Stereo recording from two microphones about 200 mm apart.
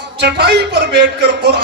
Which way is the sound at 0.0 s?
60° right (ahead or behind).